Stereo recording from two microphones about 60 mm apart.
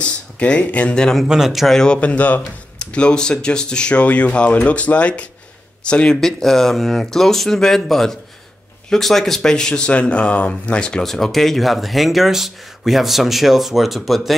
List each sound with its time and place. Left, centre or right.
0.0 s speech: centre
1.2 s speech: centre
1.8 s speech: centre
6.2 s speech: centre
11.1 s speech: centre